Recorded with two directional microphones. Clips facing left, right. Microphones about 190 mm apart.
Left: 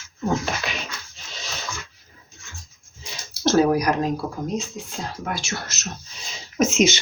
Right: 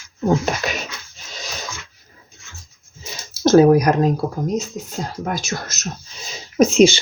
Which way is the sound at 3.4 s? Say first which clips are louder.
Right 6 dB; 45° right (ahead or behind).